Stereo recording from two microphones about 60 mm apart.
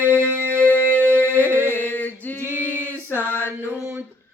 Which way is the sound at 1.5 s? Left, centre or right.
Right.